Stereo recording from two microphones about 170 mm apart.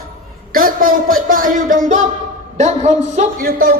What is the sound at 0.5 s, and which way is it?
A man's voice, 55° right (ahead or behind).